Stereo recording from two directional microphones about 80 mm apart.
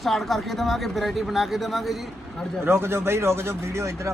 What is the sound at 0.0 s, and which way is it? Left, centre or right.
Speech, centre.